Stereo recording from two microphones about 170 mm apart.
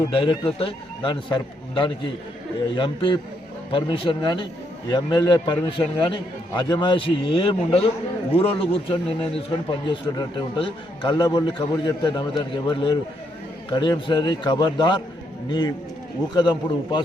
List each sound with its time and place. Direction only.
0.1 s a man's voice: 30° left (ahead or behind)